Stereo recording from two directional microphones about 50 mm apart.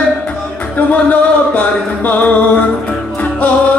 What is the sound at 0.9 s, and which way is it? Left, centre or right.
Music, left.